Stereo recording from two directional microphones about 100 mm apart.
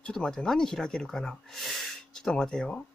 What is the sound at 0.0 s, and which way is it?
Speech, 5° left (ahead or behind).